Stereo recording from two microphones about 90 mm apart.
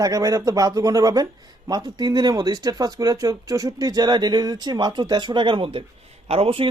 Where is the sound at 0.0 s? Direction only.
40° right (ahead or behind); by 5.8 s 75° right (ahead or behind).